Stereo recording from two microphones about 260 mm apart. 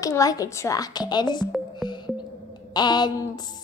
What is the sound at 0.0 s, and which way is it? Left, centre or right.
Music, centre.